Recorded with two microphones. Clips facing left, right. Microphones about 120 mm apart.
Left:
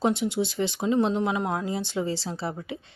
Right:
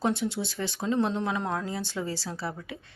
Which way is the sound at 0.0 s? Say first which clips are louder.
Left 4 dB; 20° left (ahead or behind).